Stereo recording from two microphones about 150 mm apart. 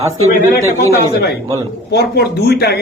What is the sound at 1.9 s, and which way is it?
Speech, 90° left.